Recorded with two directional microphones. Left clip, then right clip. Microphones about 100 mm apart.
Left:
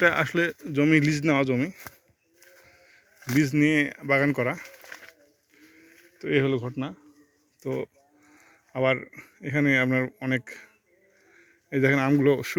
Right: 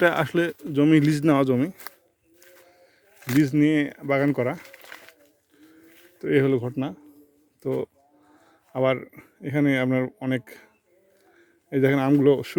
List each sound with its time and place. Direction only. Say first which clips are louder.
0.0 s speech: right 1 dB; 65° right (ahead or behind)
1.5 s speech: right 3 dB; 90° right
3.2 s a sound: right 2 dB; 10° left (ahead or behind)
3.4 s speech: right 1 dB; 40° right (ahead or behind)
4.8 s a sound: even; centre (ahead or behind)
6.1 s speech: right 3 dB; 90° right
7.6 s speech: right 3 dB; 75° right (ahead or behind)
8.3 s a sound: right 2 dB; 55° right (ahead or behind)
9.0 s a man's voice: right 1 dB; 45° right (ahead or behind); by 12.5 s 25° right (ahead or behind)